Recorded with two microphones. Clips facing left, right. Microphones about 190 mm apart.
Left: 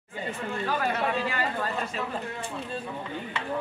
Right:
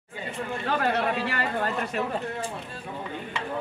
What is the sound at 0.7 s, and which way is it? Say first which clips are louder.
Speech: right 3 dB; 65° right (ahead or behind).